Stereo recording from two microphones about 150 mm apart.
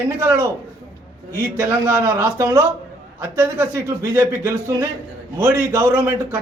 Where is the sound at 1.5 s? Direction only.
15° right (ahead or behind).